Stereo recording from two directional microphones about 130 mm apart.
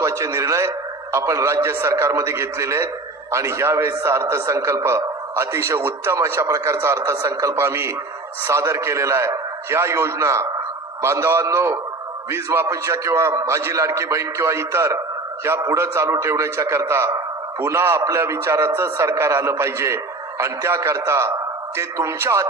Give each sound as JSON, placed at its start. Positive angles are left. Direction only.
{"t": 0.0, "sound": "a man's voice", "side_deg": -25}